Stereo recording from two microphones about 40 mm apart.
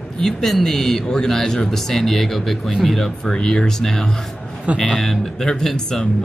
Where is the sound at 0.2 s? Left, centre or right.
Centre.